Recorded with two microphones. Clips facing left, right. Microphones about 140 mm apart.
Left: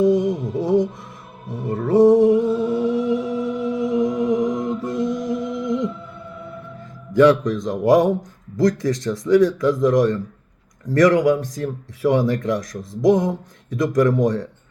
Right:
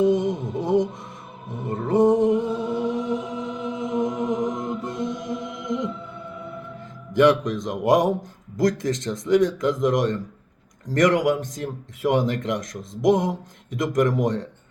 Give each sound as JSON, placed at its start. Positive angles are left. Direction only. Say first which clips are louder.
{"t": 0.0, "sound": "music", "louder": "left 3 dB", "side_deg": -20}
{"t": 1.6, "sound": "speech", "louder": "left 5 dB", "side_deg": -20}
{"t": 2.8, "sound": "music", "louder": "left 5 dB", "side_deg": -20}
{"t": 7.2, "sound": "speech", "louder": "left 3 dB", "side_deg": -20}